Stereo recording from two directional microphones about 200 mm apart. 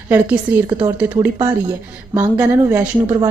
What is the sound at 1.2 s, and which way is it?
Speech, 25° right (ahead or behind).